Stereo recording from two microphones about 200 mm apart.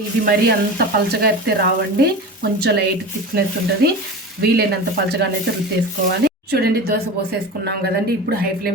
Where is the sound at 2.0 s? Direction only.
55° right (ahead or behind).